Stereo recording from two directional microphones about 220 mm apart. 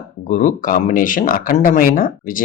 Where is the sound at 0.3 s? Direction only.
35° left (ahead or behind).